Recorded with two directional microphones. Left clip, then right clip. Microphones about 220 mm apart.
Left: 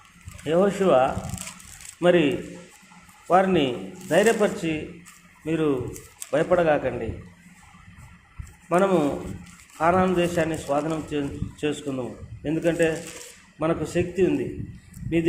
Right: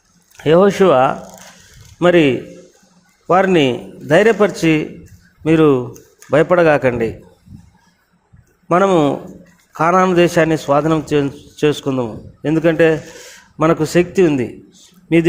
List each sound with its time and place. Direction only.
0.4 s a man's voice: 45° right (ahead or behind)
8.7 s a man's voice: 45° right (ahead or behind)